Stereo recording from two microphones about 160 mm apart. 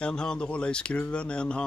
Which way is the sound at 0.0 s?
5° left (ahead or behind).